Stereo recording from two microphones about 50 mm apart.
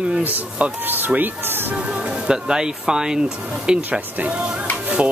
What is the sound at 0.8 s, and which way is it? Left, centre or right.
Speech, right.